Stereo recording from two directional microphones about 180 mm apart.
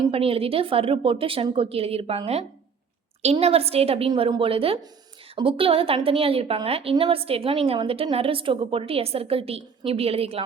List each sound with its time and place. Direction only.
0.1 s a woman's voice: 30° right (ahead or behind)